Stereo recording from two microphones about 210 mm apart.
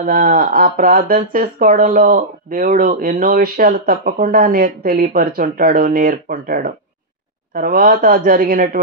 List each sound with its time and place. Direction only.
0.0 s speech: 40° right (ahead or behind)